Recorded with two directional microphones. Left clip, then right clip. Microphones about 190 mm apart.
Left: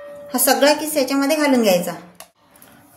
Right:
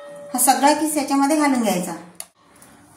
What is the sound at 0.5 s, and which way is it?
A woman's voice, 55° left (ahead or behind).